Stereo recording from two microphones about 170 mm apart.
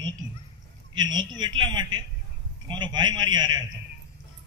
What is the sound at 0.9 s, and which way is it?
A man's voice, 25° right (ahead or behind).